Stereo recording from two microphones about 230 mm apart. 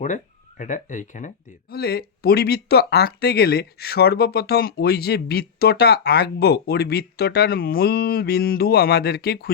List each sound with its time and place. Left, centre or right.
0.6 s speech: left
1.7 s speech: left